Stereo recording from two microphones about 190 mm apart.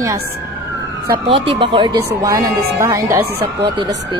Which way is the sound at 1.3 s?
25° right (ahead or behind).